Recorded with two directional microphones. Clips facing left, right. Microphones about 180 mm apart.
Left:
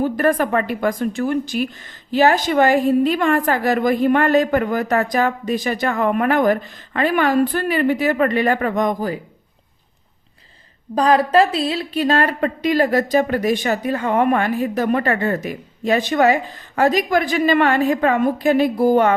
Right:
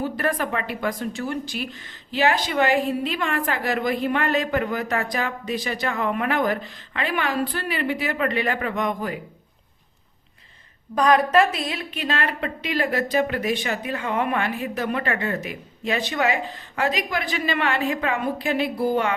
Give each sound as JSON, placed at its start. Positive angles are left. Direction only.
{"t": 0.0, "sound": "a woman's voice", "side_deg": 45}
{"t": 10.9, "sound": "a woman's voice", "side_deg": 30}